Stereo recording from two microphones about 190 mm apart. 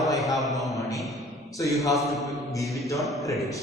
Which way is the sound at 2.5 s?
15° left (ahead or behind).